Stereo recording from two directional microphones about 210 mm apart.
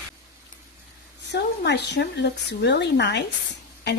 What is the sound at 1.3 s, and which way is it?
Speech, 55° left (ahead or behind).